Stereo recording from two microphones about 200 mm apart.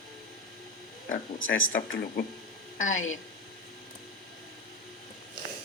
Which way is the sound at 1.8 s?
45° left (ahead or behind).